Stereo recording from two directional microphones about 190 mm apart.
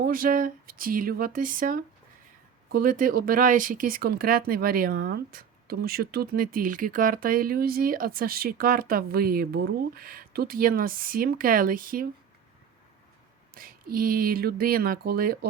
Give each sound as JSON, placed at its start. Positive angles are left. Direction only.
{"t": 0.0, "sound": "speech", "side_deg": -45}
{"t": 13.5, "sound": "speech", "side_deg": -50}